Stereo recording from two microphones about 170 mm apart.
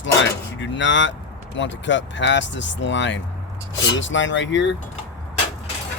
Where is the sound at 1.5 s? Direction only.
90° left.